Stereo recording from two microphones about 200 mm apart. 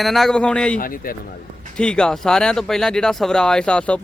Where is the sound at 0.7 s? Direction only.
45° left (ahead or behind).